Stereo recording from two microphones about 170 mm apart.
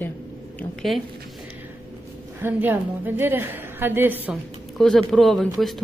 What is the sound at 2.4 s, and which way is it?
A woman's voice, 10° right (ahead or behind).